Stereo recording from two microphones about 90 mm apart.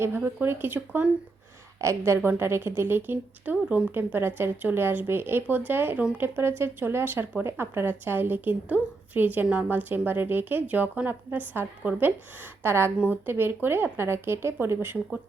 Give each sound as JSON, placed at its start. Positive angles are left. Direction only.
{"t": 0.4, "sound": "speech", "side_deg": -25}